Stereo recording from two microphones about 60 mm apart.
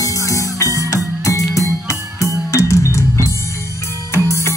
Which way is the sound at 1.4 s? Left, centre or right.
Left.